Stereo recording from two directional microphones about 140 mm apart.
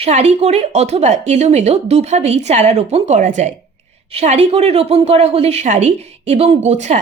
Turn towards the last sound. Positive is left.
turn(degrees=-55)  # may be behind; listen again after turning